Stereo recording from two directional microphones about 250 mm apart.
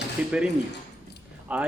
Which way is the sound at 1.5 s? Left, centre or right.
Centre.